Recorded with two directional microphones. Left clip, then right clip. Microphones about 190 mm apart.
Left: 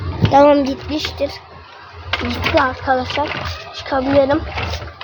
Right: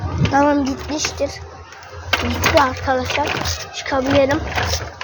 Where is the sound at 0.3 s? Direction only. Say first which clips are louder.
Left 5 dB; 20° left (ahead or behind).